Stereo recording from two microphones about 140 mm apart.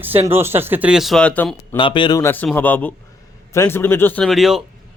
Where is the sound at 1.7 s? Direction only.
35° left (ahead or behind).